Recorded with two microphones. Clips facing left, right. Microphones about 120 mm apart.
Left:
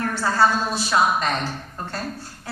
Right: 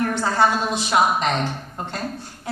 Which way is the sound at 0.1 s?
20° right (ahead or behind).